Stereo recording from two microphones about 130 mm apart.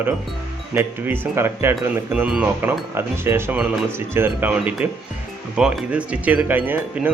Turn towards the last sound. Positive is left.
turn(degrees=-15)  # may be behind; listen again after turning